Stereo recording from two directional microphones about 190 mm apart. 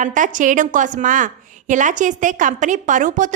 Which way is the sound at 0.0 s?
45° right (ahead or behind).